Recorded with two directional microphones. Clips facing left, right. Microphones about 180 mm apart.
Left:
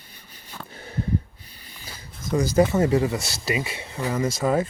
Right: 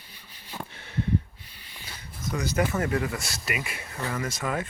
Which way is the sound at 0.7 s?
40° left (ahead or behind).